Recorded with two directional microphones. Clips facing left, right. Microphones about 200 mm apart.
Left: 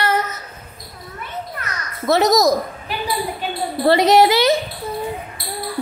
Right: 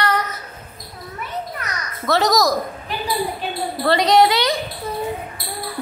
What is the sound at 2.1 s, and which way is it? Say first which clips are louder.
Speech: left 3 dB; 25° left (ahead or behind).